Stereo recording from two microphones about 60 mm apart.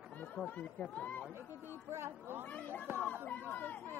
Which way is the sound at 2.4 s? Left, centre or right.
Left.